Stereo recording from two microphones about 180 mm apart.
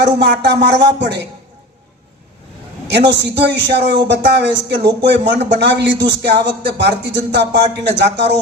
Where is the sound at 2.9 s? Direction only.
70° right (ahead or behind).